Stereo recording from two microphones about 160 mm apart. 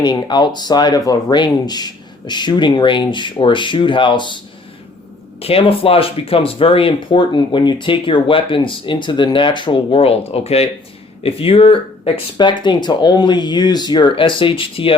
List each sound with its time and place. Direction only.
0.0 s speech: 25° left (ahead or behind)
5.4 s speech: 35° left (ahead or behind)